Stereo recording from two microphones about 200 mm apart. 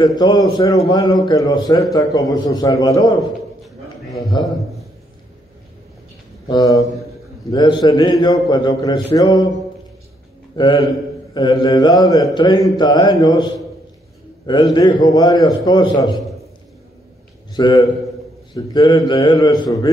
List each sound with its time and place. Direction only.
0.0 s a man's voice: 20° left (ahead or behind)
6.5 s a man's voice: 20° left (ahead or behind)
17.6 s a man's voice: 20° left (ahead or behind)